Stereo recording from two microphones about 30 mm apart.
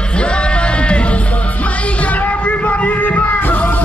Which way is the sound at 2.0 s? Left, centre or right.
Left.